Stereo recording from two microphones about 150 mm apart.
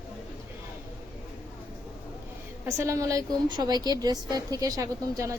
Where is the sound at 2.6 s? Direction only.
20° right (ahead or behind).